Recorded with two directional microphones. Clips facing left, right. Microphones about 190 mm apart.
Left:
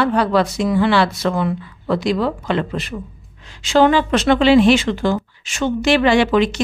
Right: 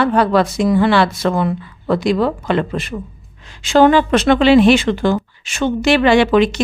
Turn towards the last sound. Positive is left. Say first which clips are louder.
# right 2 dB
turn(degrees=-65)  # may be behind; listen again after turning